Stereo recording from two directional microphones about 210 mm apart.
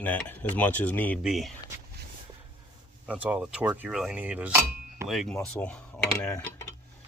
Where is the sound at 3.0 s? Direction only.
5° right (ahead or behind); by 6.6 s 10° left (ahead or behind).